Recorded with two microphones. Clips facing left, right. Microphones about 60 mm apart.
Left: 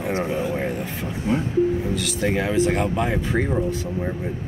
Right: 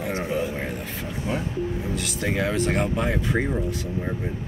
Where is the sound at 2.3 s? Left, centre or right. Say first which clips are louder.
Left 3 dB; centre.